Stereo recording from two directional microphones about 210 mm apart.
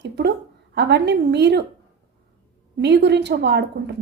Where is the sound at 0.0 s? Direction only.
50° right (ahead or behind).